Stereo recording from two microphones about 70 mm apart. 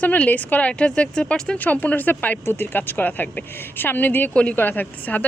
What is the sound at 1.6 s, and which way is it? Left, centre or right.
A woman's voice, left.